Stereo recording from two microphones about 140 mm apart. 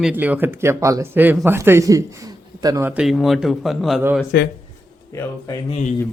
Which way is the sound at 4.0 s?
15° right (ahead or behind).